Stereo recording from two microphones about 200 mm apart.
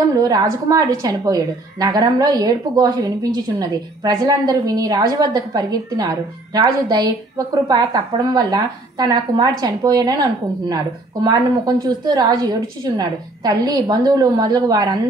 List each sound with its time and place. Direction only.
0.1 s a woman's voice: 20° right (ahead or behind)
11.2 s a woman's voice: 20° right (ahead or behind)